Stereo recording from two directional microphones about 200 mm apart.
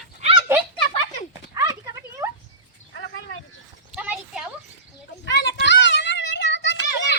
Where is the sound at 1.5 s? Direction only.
15° right (ahead or behind).